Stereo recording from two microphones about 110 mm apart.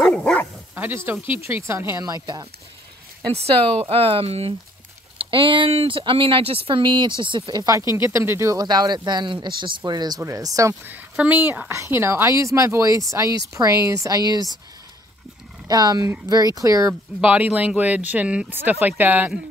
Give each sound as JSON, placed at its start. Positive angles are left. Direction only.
{"t": 0.0, "sound": "dog", "side_deg": 10}
{"t": 0.7, "sound": "a woman's voice", "side_deg": -20}
{"t": 3.8, "sound": "speech", "side_deg": -60}
{"t": 5.2, "sound": "speech", "side_deg": -55}
{"t": 7.9, "sound": "a woman's voice", "side_deg": -25}
{"t": 8.5, "sound": "speech", "side_deg": -40}
{"t": 10.9, "sound": "a woman's voice", "side_deg": -15}
{"t": 15.7, "sound": "a woman's voice", "side_deg": -35}
{"t": 17.2, "sound": "speech", "side_deg": -15}